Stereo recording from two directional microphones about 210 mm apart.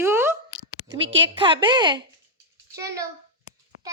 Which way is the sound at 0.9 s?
60° right (ahead or behind).